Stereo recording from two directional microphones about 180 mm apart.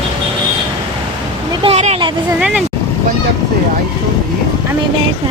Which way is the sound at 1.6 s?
35° right (ahead or behind).